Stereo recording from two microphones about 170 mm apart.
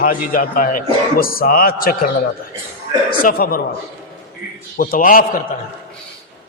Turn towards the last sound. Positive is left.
turn(degrees=55)  # may be behind; listen again after turning